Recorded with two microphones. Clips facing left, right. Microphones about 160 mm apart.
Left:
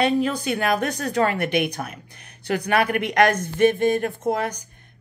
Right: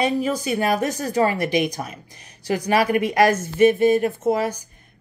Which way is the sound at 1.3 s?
60° left (ahead or behind).